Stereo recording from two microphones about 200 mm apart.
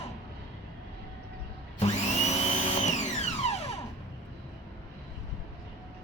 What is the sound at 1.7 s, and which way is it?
Vacuum cleaner, 35° left (ahead or behind).